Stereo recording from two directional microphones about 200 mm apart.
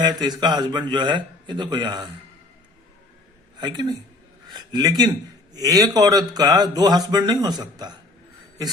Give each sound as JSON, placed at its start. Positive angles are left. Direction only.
{"t": 0.0, "sound": "speech", "side_deg": -20}
{"t": 3.6, "sound": "speech", "side_deg": -20}